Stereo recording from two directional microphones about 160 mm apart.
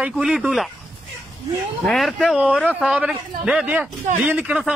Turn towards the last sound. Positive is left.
turn(degrees=-5)  # may be behind; listen again after turning